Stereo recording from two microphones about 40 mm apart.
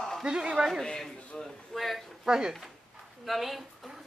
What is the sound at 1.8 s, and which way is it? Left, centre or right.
Speech, centre.